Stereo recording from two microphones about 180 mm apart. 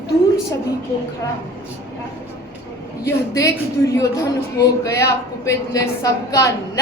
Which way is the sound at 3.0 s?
20° left (ahead or behind).